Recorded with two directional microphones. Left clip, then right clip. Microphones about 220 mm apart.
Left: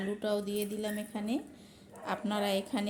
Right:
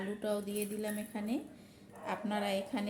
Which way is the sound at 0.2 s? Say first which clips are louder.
Left 3 dB; 25° left (ahead or behind).